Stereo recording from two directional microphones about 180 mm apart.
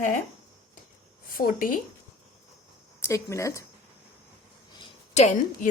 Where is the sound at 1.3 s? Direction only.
50° left (ahead or behind).